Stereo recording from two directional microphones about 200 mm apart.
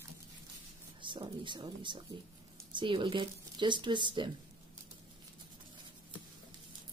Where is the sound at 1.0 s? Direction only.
25° right (ahead or behind).